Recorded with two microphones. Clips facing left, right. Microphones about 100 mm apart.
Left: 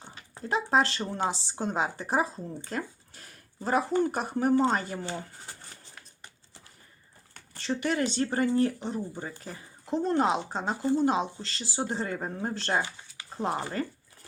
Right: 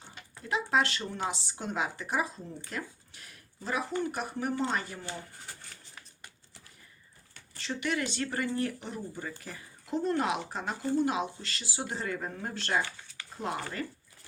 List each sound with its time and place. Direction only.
0.3 s speech: 35° left (ahead or behind)
7.5 s speech: 35° left (ahead or behind)